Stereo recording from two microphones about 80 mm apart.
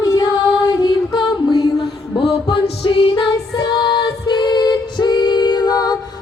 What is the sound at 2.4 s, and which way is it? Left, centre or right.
Music, left.